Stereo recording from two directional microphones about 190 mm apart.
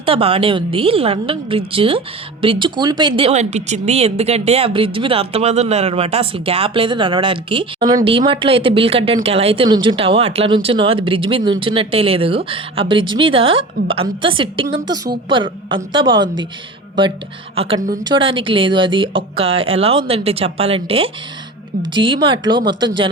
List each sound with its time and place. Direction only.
0.0 s speech: 30° right (ahead or behind)
17.5 s speech: 30° right (ahead or behind)